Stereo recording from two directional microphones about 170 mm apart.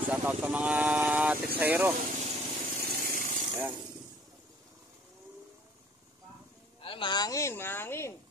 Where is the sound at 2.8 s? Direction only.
55° right (ahead or behind).